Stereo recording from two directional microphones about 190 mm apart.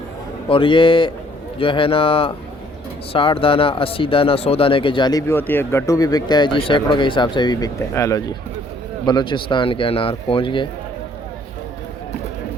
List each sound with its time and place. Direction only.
0.4 s speech: 25° left (ahead or behind)